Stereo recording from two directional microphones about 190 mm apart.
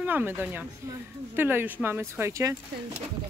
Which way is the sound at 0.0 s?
10° right (ahead or behind).